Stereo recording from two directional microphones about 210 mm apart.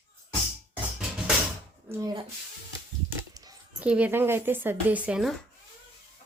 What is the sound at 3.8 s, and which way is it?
Speech, 5° right (ahead or behind).